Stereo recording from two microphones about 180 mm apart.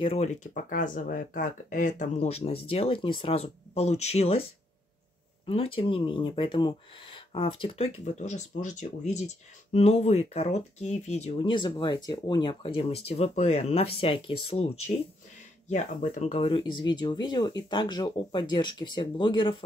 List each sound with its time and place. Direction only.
0.0 s speech: 35° left (ahead or behind)
5.5 s speech: 30° left (ahead or behind)
15.7 s speech: 45° left (ahead or behind); by 19.6 s 25° left (ahead or behind)